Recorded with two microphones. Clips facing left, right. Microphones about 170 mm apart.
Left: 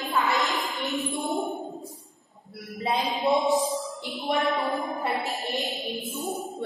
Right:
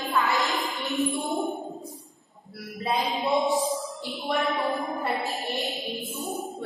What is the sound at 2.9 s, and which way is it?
Music, centre (ahead or behind).